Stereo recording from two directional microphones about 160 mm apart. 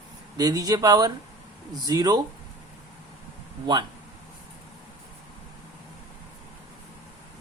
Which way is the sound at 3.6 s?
25° right (ahead or behind).